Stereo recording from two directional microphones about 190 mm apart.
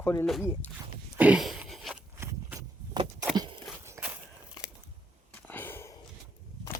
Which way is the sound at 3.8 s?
10° right (ahead or behind).